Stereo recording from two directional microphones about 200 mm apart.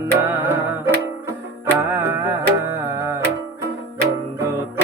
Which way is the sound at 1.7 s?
15° right (ahead or behind).